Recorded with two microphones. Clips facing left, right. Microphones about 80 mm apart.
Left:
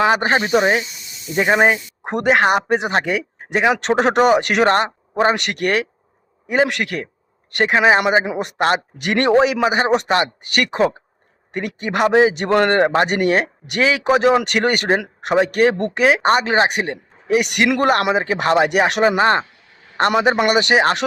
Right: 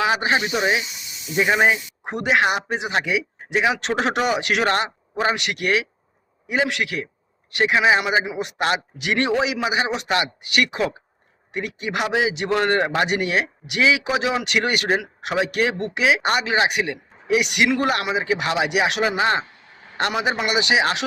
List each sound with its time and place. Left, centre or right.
0.0 s speech: left